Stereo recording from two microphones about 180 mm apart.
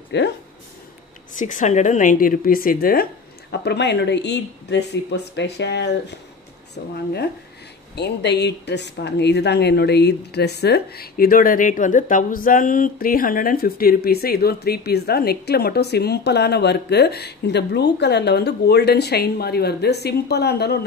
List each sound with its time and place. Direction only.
0.1 s speech: 70° left (ahead or behind)
1.3 s a woman's voice: 45° left (ahead or behind)
3.5 s speech: 70° left (ahead or behind)
6.8 s speech: 55° left (ahead or behind)
7.9 s speech: 70° left (ahead or behind)